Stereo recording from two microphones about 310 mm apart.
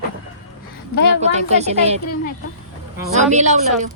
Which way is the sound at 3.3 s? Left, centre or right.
Right.